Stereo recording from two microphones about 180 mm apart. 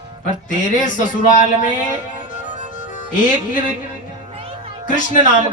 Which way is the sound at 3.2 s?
45° left (ahead or behind).